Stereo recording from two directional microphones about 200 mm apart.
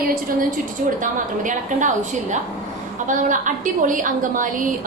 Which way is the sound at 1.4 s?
40° right (ahead or behind).